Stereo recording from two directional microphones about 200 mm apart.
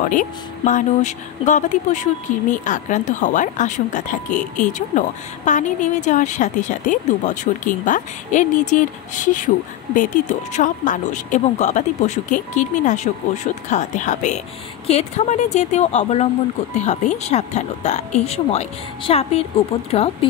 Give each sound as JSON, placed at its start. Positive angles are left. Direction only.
{"t": 0.1, "sound": "a woman's voice", "side_deg": 40}